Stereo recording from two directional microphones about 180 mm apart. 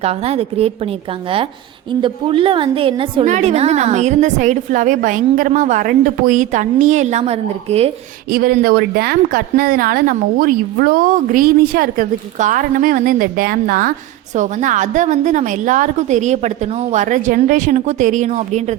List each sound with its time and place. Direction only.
0.0 s a woman's voice: 35° right (ahead or behind)
3.2 s a woman's voice: 40° right (ahead or behind)
8.3 s a woman's voice: 55° right (ahead or behind)